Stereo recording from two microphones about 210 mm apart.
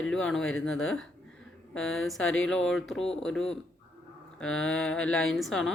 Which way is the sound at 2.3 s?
70° left (ahead or behind).